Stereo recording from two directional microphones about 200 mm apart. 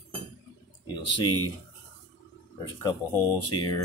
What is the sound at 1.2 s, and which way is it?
Speech, 90° left.